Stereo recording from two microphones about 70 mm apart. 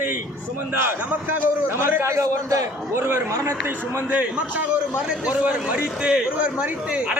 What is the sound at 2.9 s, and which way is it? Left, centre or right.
Speech, right.